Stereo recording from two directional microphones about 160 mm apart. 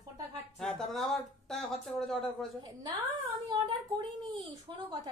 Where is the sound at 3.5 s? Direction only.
30° right (ahead or behind).